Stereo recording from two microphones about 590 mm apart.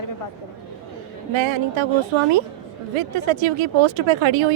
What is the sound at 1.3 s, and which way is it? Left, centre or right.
Speech, right.